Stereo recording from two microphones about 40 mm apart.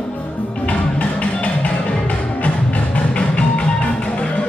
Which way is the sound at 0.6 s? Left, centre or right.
Left.